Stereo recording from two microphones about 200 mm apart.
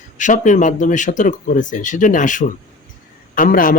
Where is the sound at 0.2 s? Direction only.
40° left (ahead or behind).